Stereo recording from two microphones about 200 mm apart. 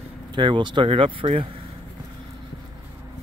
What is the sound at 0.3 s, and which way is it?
Speech, 25° right (ahead or behind).